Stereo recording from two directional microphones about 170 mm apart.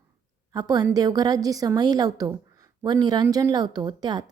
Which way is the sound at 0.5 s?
25° right (ahead or behind).